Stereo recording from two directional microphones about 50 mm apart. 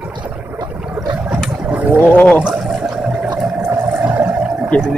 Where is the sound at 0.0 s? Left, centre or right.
Right.